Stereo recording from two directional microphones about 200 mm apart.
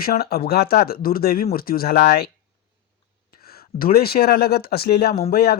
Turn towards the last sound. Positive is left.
turn(degrees=50)  # may be behind; listen again after turning